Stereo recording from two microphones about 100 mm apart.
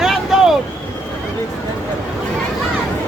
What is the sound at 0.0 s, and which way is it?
Vehicle, 5° right (ahead or behind).